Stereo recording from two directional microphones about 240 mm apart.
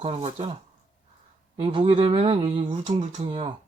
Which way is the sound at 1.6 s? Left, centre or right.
Right.